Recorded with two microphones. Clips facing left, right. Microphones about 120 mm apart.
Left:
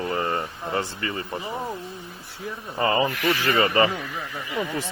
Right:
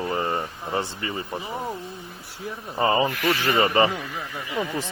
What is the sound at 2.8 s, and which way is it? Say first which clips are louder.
Speech: right 1 dB; 25° right (ahead or behind).